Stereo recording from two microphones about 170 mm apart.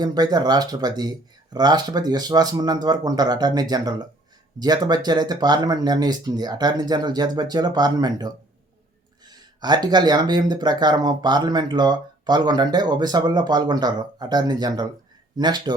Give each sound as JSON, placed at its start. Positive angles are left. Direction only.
{"t": 0.0, "sound": "speech", "side_deg": -25}